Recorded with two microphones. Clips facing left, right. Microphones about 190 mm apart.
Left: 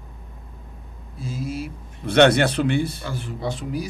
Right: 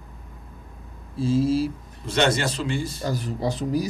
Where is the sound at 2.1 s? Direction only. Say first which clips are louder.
Left 7 dB; 60° left (ahead or behind).